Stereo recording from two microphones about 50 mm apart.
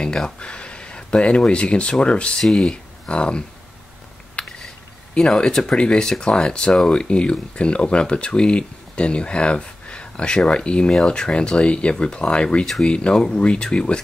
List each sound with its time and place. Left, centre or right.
0.0 s speech: centre
2.4 s speech: centre
4.4 s a sound: left
5.1 s speech: centre